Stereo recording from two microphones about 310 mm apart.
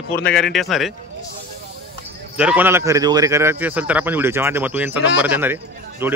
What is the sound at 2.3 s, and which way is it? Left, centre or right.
A man's voice, centre.